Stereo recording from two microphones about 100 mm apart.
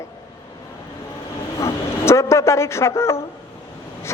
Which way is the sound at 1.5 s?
30° left (ahead or behind).